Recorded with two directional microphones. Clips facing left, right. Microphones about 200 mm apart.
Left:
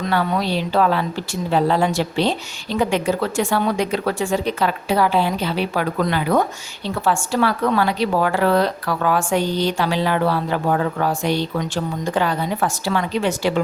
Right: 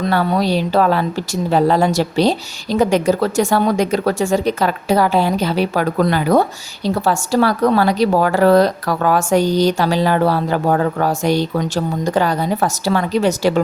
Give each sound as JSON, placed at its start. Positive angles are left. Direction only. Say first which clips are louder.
{"t": 0.0, "sound": "speech", "louder": "right 4 dB", "side_deg": -35}